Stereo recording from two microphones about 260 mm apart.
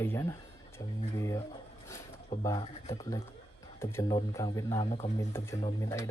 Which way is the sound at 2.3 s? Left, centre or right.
Centre.